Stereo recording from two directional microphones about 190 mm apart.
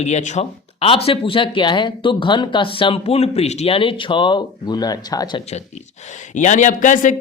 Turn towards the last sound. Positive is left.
turn(degrees=40)  # may be behind; listen again after turning